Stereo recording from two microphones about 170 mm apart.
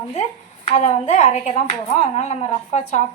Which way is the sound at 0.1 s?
40° left (ahead or behind).